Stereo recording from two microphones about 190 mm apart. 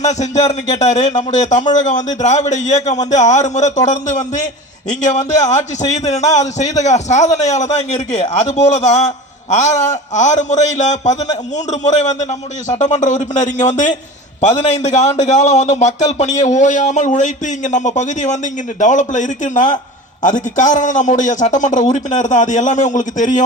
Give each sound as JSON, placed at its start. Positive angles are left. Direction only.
{"t": 0.0, "sound": "a man's voice", "side_deg": 35}